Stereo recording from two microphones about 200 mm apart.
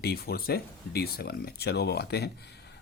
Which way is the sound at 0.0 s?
50° left (ahead or behind).